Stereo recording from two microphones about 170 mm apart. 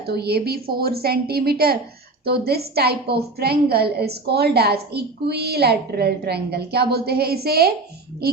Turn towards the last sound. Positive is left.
turn(degrees=-65)  # may be behind; listen again after turning